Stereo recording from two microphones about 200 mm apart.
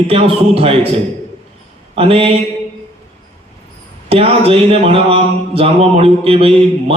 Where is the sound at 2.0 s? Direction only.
30° right (ahead or behind).